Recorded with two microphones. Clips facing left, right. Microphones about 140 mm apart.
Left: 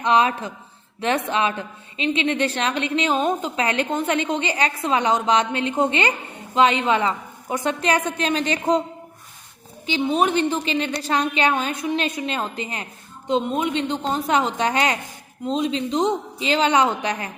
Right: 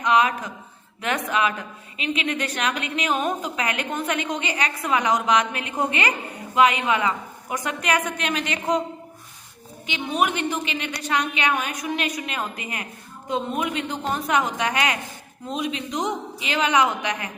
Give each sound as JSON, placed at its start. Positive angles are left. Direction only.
{"t": 0.0, "sound": "a woman's voice", "side_deg": 30}
{"t": 9.8, "sound": "a woman's voice", "side_deg": 30}